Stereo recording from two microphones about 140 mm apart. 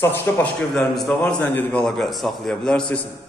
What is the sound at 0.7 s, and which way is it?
A man's voice, 5° left (ahead or behind).